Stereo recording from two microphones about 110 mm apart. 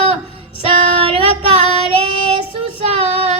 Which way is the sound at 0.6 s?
60° right (ahead or behind).